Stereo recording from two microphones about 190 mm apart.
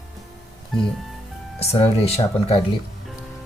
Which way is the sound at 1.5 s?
30° left (ahead or behind).